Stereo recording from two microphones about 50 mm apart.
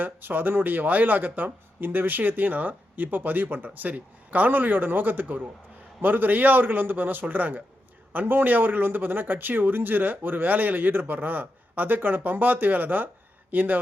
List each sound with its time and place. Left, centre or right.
0.0 s speech: right